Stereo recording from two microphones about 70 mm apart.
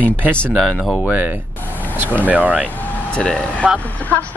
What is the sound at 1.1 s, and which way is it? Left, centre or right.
Speech, right.